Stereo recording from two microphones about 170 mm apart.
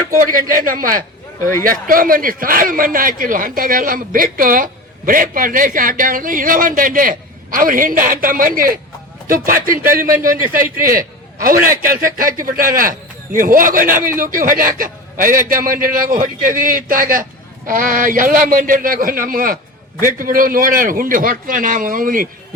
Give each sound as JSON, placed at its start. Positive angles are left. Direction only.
{"t": 0.1, "sound": "a man's voice", "side_deg": -55}